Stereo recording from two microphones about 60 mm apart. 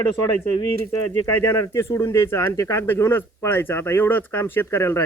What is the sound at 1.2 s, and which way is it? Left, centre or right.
Speech, left.